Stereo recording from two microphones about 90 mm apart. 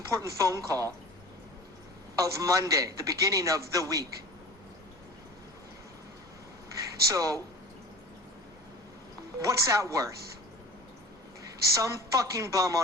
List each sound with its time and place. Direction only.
0.1 s a man's voice: 35° right (ahead or behind)
2.1 s a man's voice: 40° right (ahead or behind)
7.1 s a man's voice: 40° right (ahead or behind)
9.4 s a man's voice: 35° right (ahead or behind)
11.7 s a man's voice: 35° right (ahead or behind)